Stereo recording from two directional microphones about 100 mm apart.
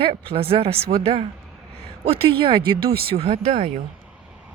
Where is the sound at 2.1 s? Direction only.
60° right (ahead or behind); by 3.7 s 90° right.